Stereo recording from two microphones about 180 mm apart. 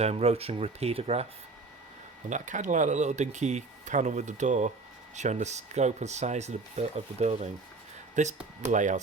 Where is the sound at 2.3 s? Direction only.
45° right (ahead or behind).